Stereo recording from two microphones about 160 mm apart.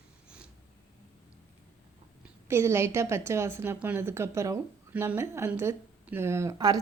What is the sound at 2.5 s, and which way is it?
Speech, 15° right (ahead or behind).